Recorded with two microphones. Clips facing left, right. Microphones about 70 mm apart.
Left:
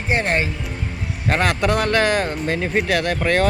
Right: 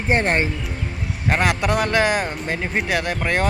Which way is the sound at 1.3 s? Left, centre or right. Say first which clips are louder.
Left 1 dB; centre.